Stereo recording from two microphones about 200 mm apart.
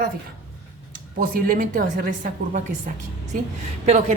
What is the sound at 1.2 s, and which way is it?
A woman's voice, 45° right (ahead or behind).